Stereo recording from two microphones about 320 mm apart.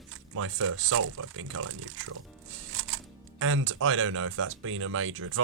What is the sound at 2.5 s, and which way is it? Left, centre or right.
Music, right.